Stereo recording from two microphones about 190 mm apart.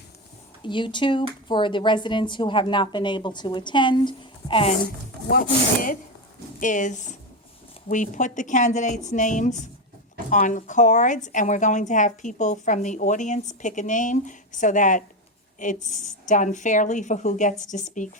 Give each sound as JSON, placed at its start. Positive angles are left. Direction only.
{"t": 0.6, "sound": "speech", "side_deg": 25}
{"t": 5.3, "sound": "a woman's voice", "side_deg": 45}